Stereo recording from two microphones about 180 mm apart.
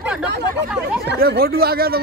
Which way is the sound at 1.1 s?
60° right (ahead or behind).